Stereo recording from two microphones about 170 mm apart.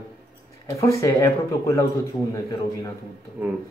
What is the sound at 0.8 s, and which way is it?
Speech, 20° left (ahead or behind).